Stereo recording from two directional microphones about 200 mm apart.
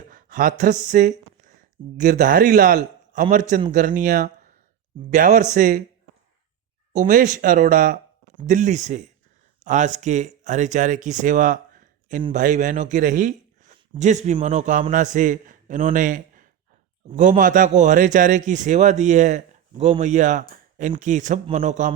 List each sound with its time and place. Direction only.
0.1 s a man's voice: 40° right (ahead or behind)
6.9 s a man's voice: 40° right (ahead or behind)